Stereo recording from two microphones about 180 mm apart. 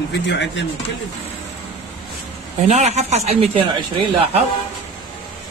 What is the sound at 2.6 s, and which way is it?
Speech, 40° right (ahead or behind).